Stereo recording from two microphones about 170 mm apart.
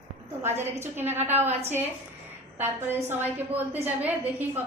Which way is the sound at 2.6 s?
10° right (ahead or behind).